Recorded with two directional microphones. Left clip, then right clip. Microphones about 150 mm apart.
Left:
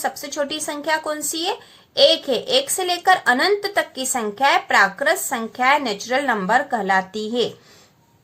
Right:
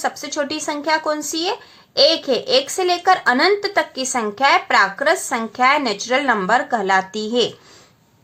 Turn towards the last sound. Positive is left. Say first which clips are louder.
# right 3 dB
turn(degrees=-25)  # may be behind; listen again after turning